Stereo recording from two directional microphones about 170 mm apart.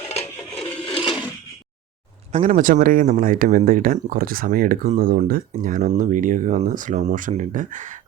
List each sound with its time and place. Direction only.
0.5 s wood: 30° left (ahead or behind)
2.3 s speech: 50° right (ahead or behind)